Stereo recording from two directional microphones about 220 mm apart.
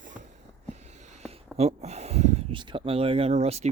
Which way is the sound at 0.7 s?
30° right (ahead or behind).